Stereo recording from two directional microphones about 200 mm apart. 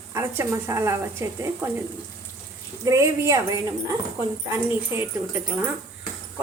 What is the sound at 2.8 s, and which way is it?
Speech, 15° right (ahead or behind).